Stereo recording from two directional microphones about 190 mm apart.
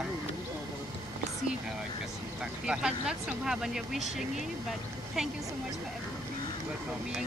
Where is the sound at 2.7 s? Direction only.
5° right (ahead or behind).